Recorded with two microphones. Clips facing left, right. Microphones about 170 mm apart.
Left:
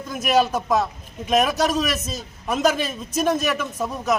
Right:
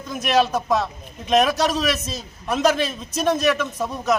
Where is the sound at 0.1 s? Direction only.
5° left (ahead or behind).